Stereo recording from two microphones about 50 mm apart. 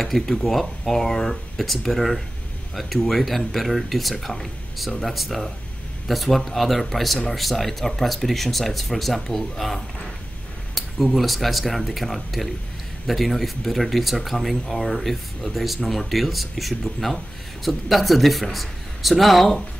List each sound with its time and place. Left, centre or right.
0.0 s speech: centre